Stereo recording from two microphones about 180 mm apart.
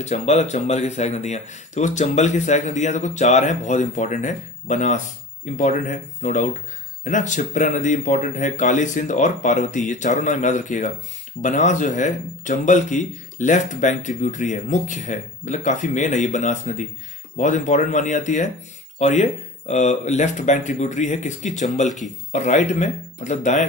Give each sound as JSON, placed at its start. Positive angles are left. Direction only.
{"t": 0.0, "sound": "speech", "side_deg": 40}
{"t": 21.8, "sound": "speech", "side_deg": 0}
{"t": 22.3, "sound": "speech", "side_deg": 40}